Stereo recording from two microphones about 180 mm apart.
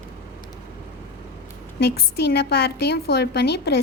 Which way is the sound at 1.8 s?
65° left (ahead or behind).